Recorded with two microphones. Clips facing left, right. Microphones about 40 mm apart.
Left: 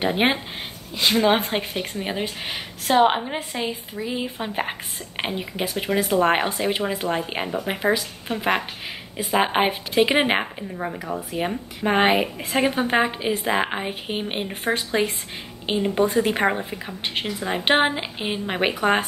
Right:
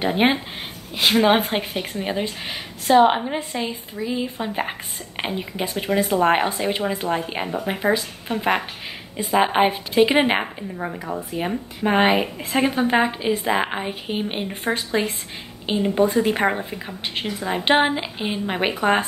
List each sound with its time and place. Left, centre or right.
0.0 s speech: centre
0.9 s a woman's voice: centre
1.4 s speech: centre